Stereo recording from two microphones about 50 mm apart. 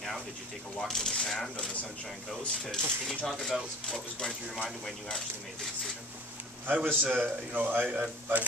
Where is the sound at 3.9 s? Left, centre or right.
Centre.